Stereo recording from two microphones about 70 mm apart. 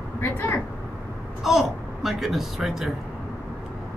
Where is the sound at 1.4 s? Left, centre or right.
Centre.